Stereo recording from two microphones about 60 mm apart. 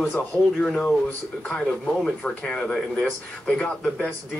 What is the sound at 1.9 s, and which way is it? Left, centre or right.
Speech, centre.